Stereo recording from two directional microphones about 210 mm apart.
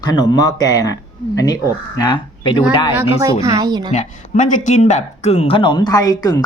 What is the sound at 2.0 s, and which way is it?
Speech, 20° left (ahead or behind).